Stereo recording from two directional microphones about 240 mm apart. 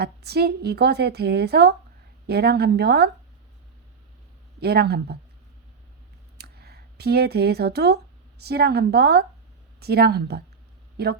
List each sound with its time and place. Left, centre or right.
0.0 s a woman's voice: right
4.6 s speech: right
6.3 s speech: right